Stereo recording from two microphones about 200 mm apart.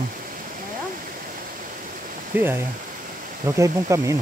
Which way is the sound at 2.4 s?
10° right (ahead or behind).